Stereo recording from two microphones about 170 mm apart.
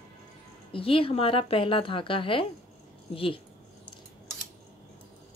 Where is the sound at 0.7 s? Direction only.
30° left (ahead or behind).